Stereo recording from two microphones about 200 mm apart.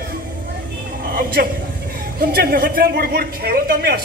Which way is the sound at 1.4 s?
50° right (ahead or behind).